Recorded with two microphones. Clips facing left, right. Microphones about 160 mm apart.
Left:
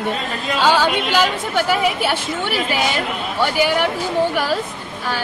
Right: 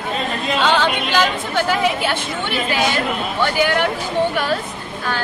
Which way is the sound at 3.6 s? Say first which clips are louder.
Even; 10° left (ahead or behind).